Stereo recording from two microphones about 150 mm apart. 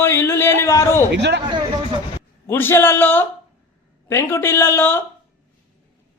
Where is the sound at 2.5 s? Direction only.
15° left (ahead or behind).